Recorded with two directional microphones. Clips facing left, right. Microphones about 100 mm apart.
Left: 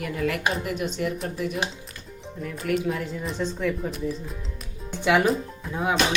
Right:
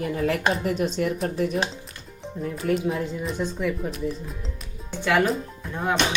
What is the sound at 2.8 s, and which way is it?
Speech, 20° right (ahead or behind).